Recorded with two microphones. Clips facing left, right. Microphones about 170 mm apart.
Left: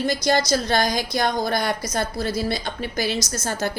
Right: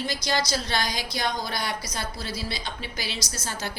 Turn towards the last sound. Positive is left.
turn(degrees=45)  # may be behind; listen again after turning